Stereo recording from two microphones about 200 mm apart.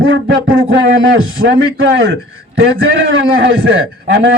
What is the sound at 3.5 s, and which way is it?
Speech, 65° right (ahead or behind).